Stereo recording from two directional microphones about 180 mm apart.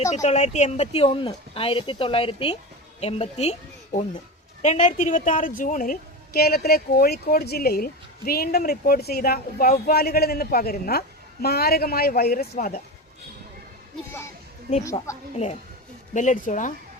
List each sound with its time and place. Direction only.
0.1 s speech: 40° left (ahead or behind)
4.6 s a woman's voice: 40° left (ahead or behind)
16.1 s speech: 45° left (ahead or behind)